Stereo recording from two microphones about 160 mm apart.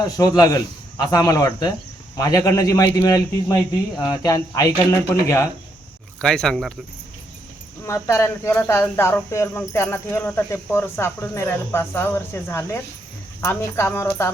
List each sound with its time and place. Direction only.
0.0 s a man's voice: 25° left (ahead or behind)
6.2 s speech: 5° left (ahead or behind)
7.9 s speech: 20° left (ahead or behind)